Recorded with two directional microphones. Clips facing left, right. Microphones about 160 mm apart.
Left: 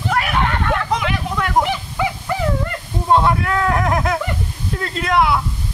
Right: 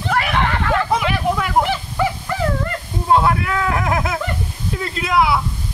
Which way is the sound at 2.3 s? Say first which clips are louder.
Left 1 dB; 15° left (ahead or behind).